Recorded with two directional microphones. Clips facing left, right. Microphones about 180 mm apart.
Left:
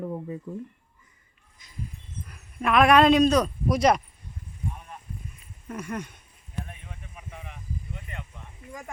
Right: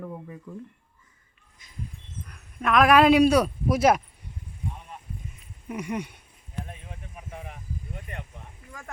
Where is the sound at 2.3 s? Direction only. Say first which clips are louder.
Even; centre (ahead or behind).